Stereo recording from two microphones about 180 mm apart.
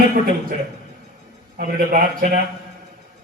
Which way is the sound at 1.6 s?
50° right (ahead or behind).